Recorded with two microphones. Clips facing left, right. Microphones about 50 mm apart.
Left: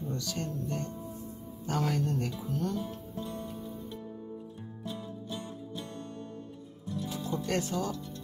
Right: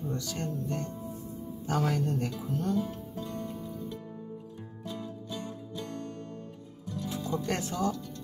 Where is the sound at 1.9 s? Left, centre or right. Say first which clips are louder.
Right 1 dB; right.